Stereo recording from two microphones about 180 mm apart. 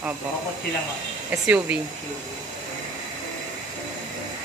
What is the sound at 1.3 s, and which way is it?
Speech, 10° right (ahead or behind).